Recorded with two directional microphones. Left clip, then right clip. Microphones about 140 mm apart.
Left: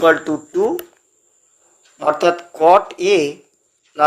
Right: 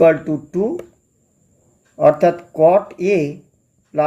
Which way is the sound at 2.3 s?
15° left (ahead or behind).